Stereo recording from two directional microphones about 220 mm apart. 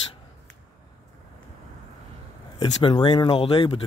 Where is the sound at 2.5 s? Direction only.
20° left (ahead or behind).